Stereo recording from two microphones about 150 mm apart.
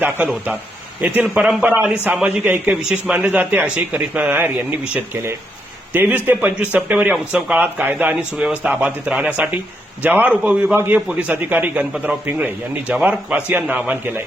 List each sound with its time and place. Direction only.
0.0 s speech: 10° right (ahead or behind)
5.9 s speech: 10° right (ahead or behind)